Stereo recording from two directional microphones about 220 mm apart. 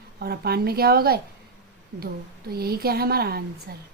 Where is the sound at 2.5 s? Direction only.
45° right (ahead or behind).